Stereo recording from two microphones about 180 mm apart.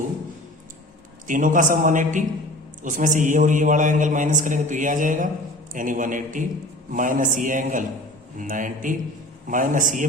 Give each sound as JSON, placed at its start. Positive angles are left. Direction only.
{"t": 1.3, "sound": "a man's voice", "side_deg": -45}